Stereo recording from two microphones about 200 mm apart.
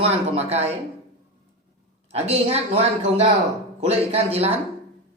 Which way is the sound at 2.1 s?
30° right (ahead or behind).